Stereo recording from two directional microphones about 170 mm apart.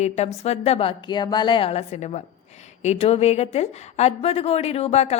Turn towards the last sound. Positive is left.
turn(degrees=40)  # may be behind; listen again after turning